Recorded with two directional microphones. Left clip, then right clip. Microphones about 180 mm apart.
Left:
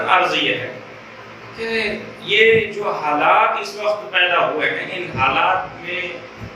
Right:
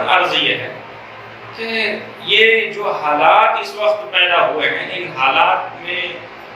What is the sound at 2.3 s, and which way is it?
A man's voice, 10° left (ahead or behind).